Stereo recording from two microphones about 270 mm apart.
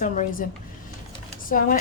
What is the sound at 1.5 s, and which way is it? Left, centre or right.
Speech, left.